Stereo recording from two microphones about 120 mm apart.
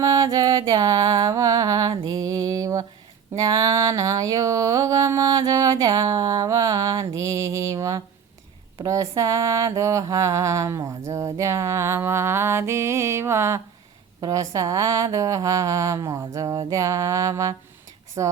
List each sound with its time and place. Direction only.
0.0 s music: 30° right (ahead or behind)
3.3 s a sound: 30° right (ahead or behind)
8.8 s mantra: 25° right (ahead or behind)